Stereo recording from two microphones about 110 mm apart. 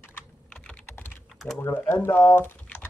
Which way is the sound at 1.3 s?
Centre (ahead or behind).